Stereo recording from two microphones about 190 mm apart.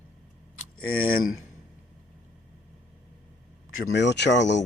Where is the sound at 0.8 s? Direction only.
50° left (ahead or behind).